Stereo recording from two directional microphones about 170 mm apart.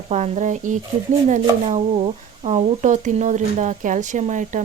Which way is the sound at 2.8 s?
45° right (ahead or behind).